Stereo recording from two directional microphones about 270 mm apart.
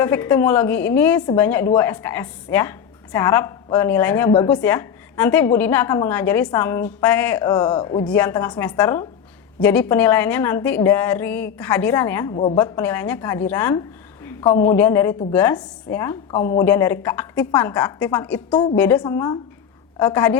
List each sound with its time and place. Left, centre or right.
0.0 s a woman's voice: centre
12.3 s a woman's voice: left
12.5 s a woman's voice: centre